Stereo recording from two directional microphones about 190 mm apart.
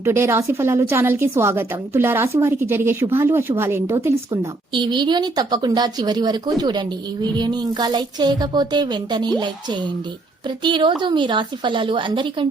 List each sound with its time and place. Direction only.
0.0 s a woman's voice: 15° right (ahead or behind)